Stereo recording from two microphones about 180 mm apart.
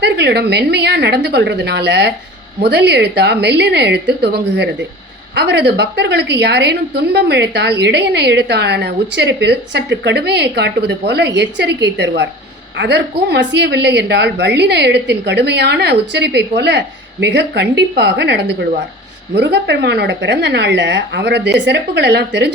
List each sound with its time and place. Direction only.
0.0 s a woman's voice: 65° right (ahead or behind)